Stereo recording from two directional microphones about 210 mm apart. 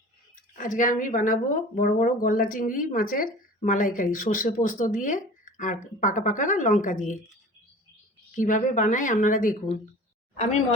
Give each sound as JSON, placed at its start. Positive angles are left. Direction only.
{"t": 0.5, "sound": "a woman's voice", "side_deg": 40}
{"t": 8.4, "sound": "a woman's voice", "side_deg": 40}